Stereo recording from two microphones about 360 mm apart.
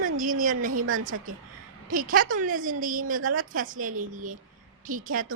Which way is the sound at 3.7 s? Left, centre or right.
Right.